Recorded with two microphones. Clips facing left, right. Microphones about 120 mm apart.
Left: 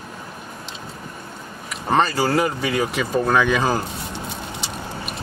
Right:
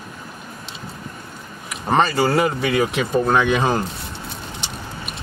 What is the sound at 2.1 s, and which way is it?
Speech, centre (ahead or behind).